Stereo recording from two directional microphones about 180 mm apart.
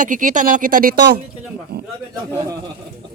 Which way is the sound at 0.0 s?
45° right (ahead or behind).